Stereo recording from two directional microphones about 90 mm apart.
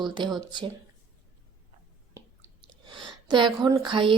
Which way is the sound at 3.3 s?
60° right (ahead or behind).